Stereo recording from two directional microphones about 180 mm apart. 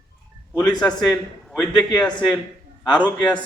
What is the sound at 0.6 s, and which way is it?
A man's voice, 10° left (ahead or behind).